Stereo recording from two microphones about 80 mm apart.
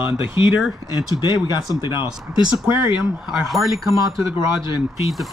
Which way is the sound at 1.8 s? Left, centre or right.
Left.